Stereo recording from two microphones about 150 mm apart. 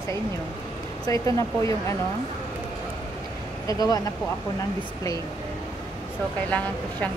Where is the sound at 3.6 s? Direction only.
25° left (ahead or behind).